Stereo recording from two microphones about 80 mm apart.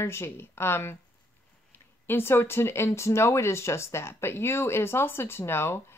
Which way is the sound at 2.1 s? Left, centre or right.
Left.